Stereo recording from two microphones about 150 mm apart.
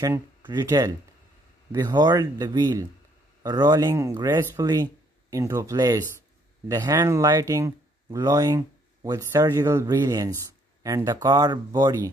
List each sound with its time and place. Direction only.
0.0 s speech: 15° right (ahead or behind)